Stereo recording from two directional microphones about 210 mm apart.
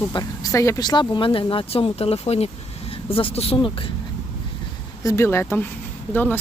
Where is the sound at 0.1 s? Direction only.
20° left (ahead or behind).